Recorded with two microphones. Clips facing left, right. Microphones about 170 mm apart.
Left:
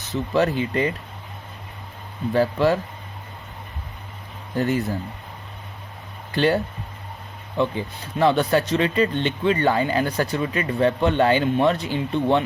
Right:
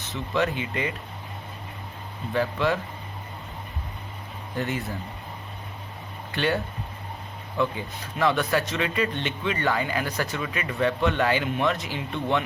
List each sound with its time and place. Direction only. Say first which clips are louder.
0.1 s speech: left 5 dB; 35° left (ahead or behind)
2.3 s speech: left 5 dB; 35° left (ahead or behind)
4.5 s speech: left 7 dB; 40° left (ahead or behind)
6.3 s speech: left 6 dB; 30° left (ahead or behind)